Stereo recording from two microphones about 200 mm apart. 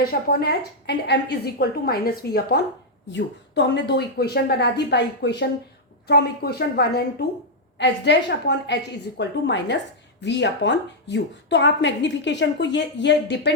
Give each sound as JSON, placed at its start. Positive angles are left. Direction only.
{"t": 0.1, "sound": "a woman's voice", "side_deg": 50}
{"t": 3.1, "sound": "a woman's voice", "side_deg": 65}